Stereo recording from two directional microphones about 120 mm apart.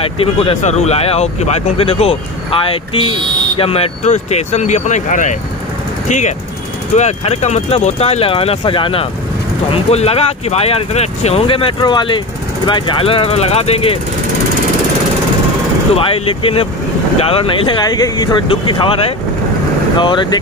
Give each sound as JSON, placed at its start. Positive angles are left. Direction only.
{"t": 0.0, "sound": "speech", "side_deg": 50}
{"t": 0.6, "sound": "speech", "side_deg": 70}
{"t": 7.0, "sound": "speech", "side_deg": 70}
{"t": 9.7, "sound": "speech", "side_deg": 60}
{"t": 16.0, "sound": "speech", "side_deg": 50}